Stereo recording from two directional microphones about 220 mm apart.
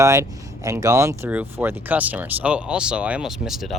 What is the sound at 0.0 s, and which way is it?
Speech, 15° right (ahead or behind).